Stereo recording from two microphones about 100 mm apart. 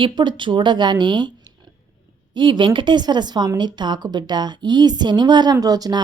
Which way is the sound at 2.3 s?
55° right (ahead or behind).